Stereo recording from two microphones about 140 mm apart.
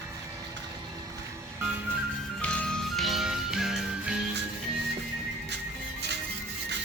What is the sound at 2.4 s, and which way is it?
Music, 5° left (ahead or behind).